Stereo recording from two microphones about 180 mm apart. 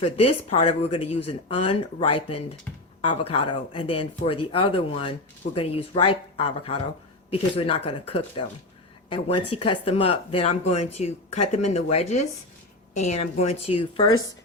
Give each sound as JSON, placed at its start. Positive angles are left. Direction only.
{"t": 0.0, "sound": "speech", "side_deg": 35}